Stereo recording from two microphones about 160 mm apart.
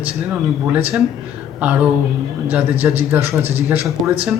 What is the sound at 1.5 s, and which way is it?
Mantra, 10° right (ahead or behind).